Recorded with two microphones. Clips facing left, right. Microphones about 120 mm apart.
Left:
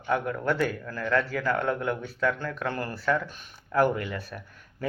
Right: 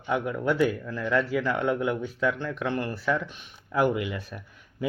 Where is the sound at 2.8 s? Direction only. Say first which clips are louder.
Even; 5° right (ahead or behind).